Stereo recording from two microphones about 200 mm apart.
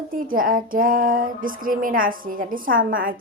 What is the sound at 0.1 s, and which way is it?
Female singing, 45° right (ahead or behind).